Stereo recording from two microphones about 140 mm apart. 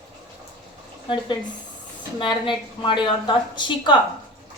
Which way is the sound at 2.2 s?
35° left (ahead or behind).